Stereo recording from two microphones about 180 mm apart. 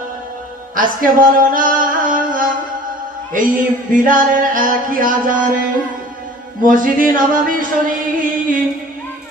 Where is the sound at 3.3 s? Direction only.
50° right (ahead or behind).